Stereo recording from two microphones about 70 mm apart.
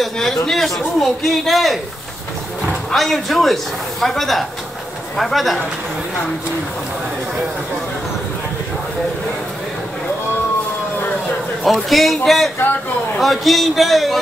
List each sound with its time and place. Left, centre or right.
0.0 s speech: centre
11.6 s speech: centre
12.6 s a man's voice: left
13.2 s speech: centre